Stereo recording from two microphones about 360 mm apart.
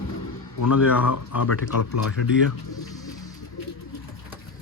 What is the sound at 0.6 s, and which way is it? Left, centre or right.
Speech, left.